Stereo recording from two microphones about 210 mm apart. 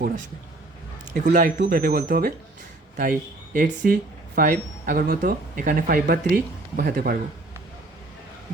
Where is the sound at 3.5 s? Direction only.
45° right (ahead or behind).